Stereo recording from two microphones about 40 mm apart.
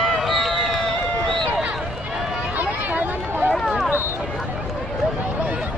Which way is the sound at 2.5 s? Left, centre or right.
Right.